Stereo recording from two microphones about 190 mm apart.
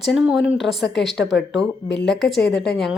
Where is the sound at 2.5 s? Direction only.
Centre (ahead or behind).